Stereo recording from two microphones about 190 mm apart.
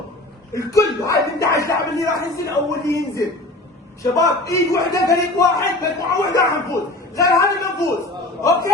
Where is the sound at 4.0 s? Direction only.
15° left (ahead or behind).